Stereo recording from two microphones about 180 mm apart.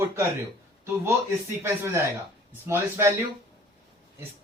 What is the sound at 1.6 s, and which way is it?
Speech, 15° right (ahead or behind).